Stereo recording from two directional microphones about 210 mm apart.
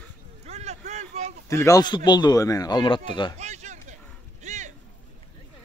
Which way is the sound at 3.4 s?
35° right (ahead or behind).